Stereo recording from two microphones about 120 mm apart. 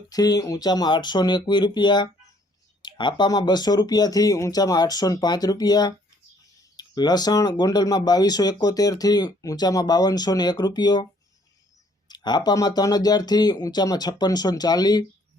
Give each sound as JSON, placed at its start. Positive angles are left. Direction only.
{"t": 0.1, "sound": "speech", "side_deg": 30}
{"t": 12.0, "sound": "speech", "side_deg": 35}